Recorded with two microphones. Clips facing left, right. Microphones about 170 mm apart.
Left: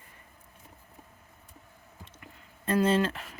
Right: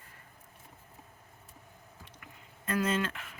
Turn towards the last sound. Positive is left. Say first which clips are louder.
# left 6 dB
turn(degrees=35)  # may be behind; listen again after turning